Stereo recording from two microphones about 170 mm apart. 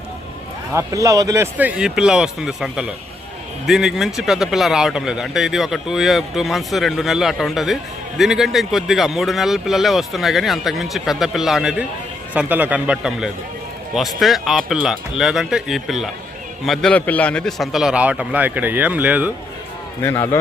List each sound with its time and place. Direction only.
0.7 s speech: 20° right (ahead or behind)
20.0 s a man's voice: 15° left (ahead or behind)